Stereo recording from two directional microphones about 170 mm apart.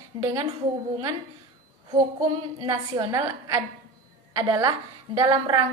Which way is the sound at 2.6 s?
25° right (ahead or behind).